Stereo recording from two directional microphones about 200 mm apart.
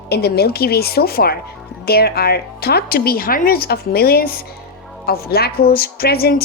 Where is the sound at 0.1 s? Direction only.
55° left (ahead or behind).